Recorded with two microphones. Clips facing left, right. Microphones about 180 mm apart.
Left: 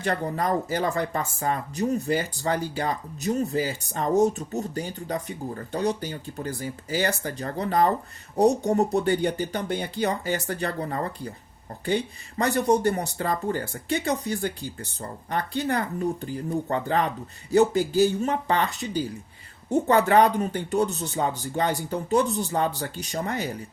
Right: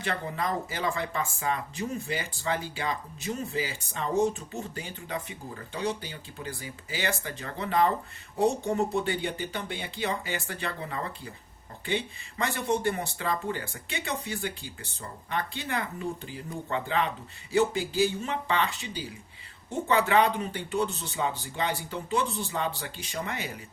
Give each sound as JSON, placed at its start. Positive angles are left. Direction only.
{"t": 0.0, "sound": "speech", "side_deg": 40}